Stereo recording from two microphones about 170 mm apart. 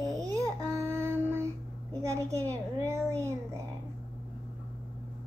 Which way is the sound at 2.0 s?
15° right (ahead or behind).